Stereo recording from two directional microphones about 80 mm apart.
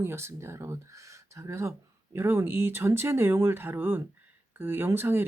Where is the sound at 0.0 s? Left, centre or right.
Right.